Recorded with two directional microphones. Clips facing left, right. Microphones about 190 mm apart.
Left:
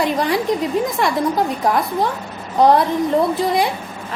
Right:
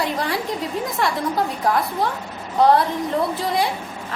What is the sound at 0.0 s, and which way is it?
Speech, 15° left (ahead or behind).